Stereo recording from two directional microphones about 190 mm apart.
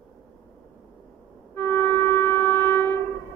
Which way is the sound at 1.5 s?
10° left (ahead or behind).